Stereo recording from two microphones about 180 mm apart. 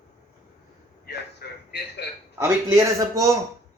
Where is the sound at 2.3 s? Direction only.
15° right (ahead or behind).